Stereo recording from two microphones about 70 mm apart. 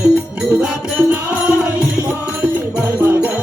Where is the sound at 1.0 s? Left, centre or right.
Right.